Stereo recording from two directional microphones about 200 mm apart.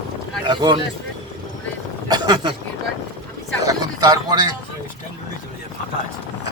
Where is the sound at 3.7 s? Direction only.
20° right (ahead or behind).